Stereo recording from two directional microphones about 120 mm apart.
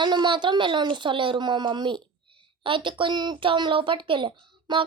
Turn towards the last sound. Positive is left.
turn(degrees=-40)  # may be behind; listen again after turning